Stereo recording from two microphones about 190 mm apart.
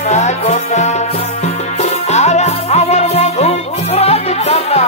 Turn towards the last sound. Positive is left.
turn(degrees=35)  # may be behind; listen again after turning